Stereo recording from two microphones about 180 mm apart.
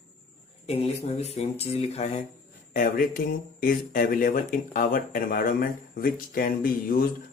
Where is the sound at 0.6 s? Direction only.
35° left (ahead or behind).